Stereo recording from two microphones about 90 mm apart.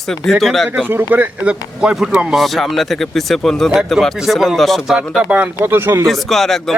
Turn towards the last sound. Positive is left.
turn(degrees=0)  # may be behind; listen again after turning